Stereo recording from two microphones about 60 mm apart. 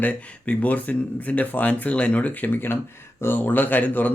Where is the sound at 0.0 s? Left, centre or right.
Left.